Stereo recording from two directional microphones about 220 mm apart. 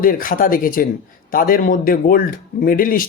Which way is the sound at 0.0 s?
40° left (ahead or behind).